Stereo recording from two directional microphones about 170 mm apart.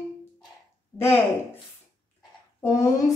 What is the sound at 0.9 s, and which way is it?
Speech, 15° left (ahead or behind).